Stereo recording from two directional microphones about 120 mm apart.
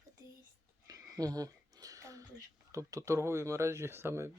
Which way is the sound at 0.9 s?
30° right (ahead or behind).